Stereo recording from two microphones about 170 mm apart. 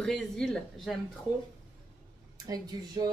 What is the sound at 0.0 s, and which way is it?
Speech, 5° left (ahead or behind).